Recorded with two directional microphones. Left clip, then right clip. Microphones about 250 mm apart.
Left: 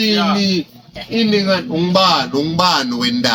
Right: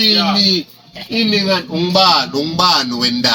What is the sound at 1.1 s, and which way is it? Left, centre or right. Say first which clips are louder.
Speech: even; centre.